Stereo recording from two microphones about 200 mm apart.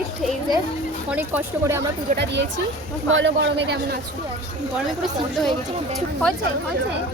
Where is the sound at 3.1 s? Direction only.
70° right (ahead or behind).